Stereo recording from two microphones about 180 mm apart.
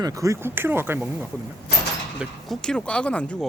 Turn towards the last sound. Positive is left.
turn(degrees=5)  # may be behind; listen again after turning